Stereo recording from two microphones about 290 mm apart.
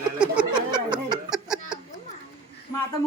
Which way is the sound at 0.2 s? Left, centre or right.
Centre.